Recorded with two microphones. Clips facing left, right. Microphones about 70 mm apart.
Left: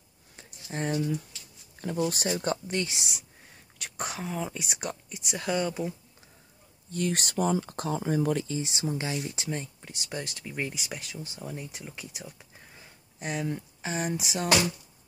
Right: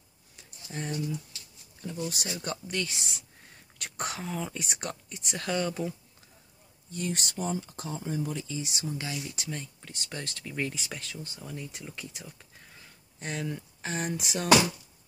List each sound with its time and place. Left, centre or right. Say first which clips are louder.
0.4 s a sound: left 5 dB; left
1.8 s speech: left 6 dB; left
2.7 s speech: left 2 dB; left
3.7 s speech: even; centre
6.9 s speech: left 4 dB; left
8.5 s speech: left 4 dB; left
9.8 s speech: left 3 dB; centre